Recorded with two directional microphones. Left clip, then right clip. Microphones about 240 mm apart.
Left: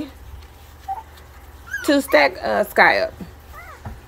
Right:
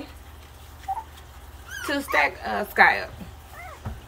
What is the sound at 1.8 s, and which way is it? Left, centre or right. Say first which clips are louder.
Speech: left 7 dB; left.